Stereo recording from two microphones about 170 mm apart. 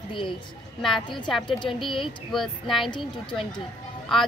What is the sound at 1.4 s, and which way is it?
Speech, 30° left (ahead or behind).